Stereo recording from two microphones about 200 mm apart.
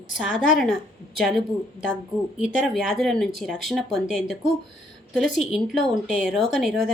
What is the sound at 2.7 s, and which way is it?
Speech, centre (ahead or behind).